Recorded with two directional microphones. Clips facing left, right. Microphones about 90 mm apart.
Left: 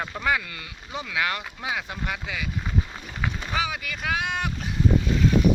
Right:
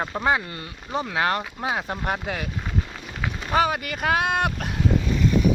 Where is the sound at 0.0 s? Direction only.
30° right (ahead or behind); by 2.5 s 45° right (ahead or behind).